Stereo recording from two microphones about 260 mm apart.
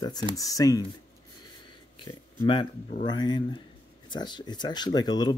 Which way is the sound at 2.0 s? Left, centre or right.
Centre.